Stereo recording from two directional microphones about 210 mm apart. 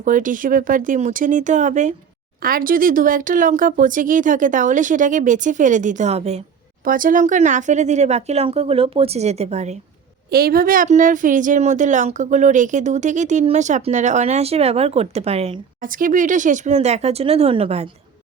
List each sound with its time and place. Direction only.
0.0 s speech: 40° right (ahead or behind)
6.8 s speech: 40° right (ahead or behind)
10.2 s speech: 45° right (ahead or behind); by 15.6 s 30° right (ahead or behind)
15.8 s speech: 40° right (ahead or behind)